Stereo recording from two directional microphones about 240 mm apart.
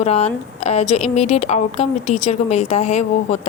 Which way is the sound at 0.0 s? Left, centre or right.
Left.